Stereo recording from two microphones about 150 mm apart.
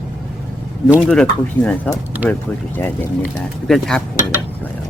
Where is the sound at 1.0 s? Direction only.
5° left (ahead or behind).